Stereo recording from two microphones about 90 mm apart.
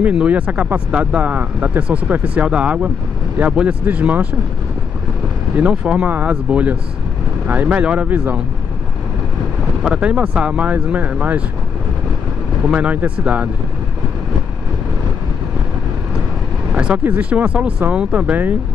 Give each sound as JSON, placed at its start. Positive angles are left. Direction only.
{"t": 0.0, "sound": "speech", "side_deg": -15}
{"t": 5.6, "sound": "speech", "side_deg": -15}
{"t": 9.8, "sound": "speech", "side_deg": -15}
{"t": 12.6, "sound": "speech", "side_deg": -15}
{"t": 16.7, "sound": "speech", "side_deg": -15}